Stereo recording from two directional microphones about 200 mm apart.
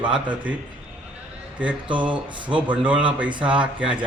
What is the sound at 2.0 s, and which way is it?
A man's voice, 5° right (ahead or behind).